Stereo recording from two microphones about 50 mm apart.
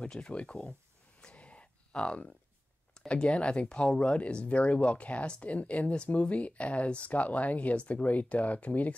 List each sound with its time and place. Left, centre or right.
0.0 s speech: left
1.2 s a sound: left
3.1 s speech: centre